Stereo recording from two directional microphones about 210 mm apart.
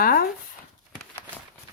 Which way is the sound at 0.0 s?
45° left (ahead or behind).